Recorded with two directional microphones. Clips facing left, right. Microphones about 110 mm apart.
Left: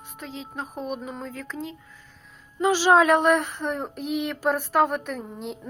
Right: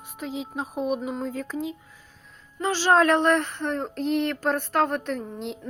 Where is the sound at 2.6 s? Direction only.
15° left (ahead or behind).